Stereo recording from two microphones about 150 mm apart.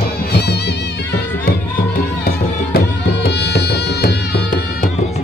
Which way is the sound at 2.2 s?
90° left.